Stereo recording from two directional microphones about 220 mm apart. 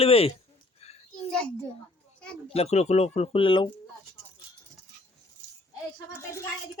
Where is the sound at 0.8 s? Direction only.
30° left (ahead or behind).